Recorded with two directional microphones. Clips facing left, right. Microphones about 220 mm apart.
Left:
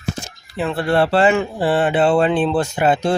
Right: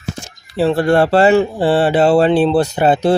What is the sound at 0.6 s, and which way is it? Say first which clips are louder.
Speech: right 5 dB; 35° right (ahead or behind).